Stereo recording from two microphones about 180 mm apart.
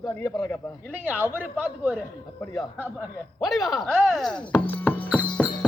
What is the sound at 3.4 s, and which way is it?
A man's voice, centre (ahead or behind).